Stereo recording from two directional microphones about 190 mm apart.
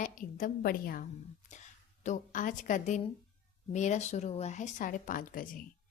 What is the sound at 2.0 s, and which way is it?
A woman's voice, 45° left (ahead or behind).